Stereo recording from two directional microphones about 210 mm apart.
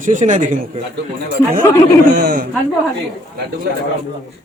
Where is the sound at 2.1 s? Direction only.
50° right (ahead or behind).